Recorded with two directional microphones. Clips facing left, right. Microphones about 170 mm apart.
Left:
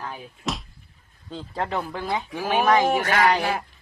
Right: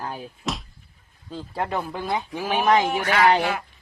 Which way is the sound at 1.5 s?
10° right (ahead or behind).